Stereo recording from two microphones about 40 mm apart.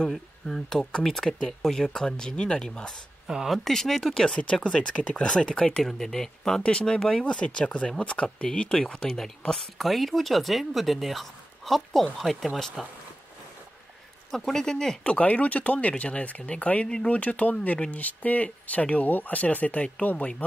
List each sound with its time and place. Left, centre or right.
0.7 s speech: centre
3.3 s speech: right
3.6 s speech: centre
5.9 s speech: centre
6.6 s speech: left
8.9 s speech: centre
14.3 s speech: centre
15.0 s speech: left
16.8 s speech: left
17.1 s speech: left